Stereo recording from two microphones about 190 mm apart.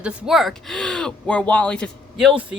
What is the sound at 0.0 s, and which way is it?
Speech, centre (ahead or behind).